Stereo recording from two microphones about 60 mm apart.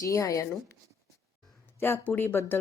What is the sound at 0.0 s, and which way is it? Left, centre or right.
Speech, left.